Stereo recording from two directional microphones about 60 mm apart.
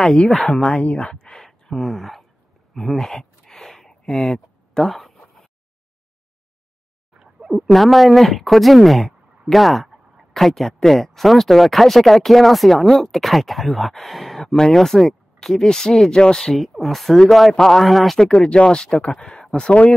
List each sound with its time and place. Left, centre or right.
0.0 s speech: centre
1.4 s gasp: centre
2.7 s a sound: centre
7.2 s speech: centre
18.2 s speech: centre